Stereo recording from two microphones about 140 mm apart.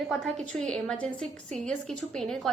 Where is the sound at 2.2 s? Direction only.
5° left (ahead or behind).